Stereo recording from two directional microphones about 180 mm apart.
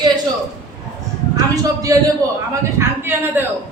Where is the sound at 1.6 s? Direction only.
20° right (ahead or behind).